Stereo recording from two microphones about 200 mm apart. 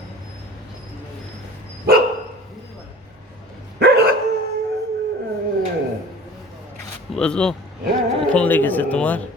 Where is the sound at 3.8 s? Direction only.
55° right (ahead or behind).